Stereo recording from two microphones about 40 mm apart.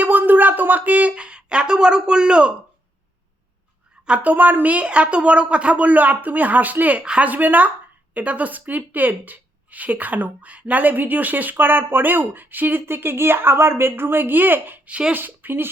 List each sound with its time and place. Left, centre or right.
0.0 s a sound: right
1.1 s speech: right
4.2 s speech: right
4.8 s a woman's voice: right
5.8 s speech: right
12.8 s speech: right